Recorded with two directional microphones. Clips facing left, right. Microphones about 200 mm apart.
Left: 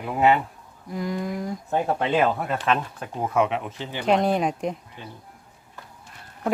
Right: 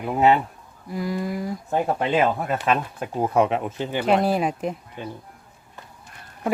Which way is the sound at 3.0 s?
30° right (ahead or behind).